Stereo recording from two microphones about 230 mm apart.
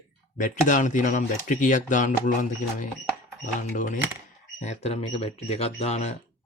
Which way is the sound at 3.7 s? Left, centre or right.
Left.